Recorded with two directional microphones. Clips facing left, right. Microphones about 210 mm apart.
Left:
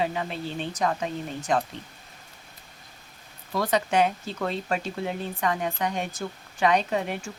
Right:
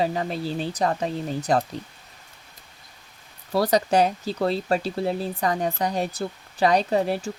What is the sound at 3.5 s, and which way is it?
Speech, 35° right (ahead or behind).